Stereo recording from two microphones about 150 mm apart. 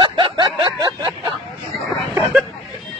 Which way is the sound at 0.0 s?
30° right (ahead or behind).